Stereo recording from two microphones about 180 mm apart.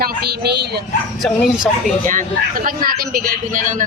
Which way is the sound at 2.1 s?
50° right (ahead or behind).